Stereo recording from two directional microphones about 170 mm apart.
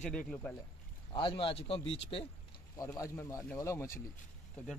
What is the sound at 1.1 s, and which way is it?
Speech, 30° left (ahead or behind).